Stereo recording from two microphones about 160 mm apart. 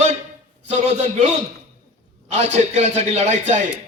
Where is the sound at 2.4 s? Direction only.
45° right (ahead or behind).